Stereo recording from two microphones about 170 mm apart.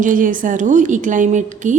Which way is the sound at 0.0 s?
50° right (ahead or behind).